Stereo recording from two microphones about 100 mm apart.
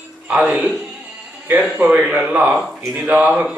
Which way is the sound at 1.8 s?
10° right (ahead or behind).